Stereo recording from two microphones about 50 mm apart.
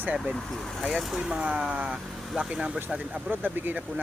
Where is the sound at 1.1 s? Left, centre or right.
Centre.